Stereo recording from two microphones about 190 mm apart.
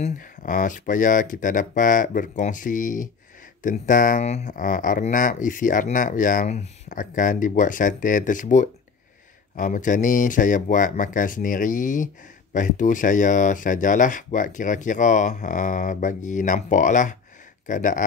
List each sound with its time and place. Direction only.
0.0 s speech: 40° left (ahead or behind)